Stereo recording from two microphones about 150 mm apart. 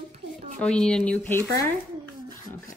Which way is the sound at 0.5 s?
5° left (ahead or behind).